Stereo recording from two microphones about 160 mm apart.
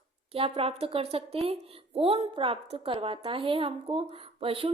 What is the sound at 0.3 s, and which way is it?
Speech, 35° right (ahead or behind).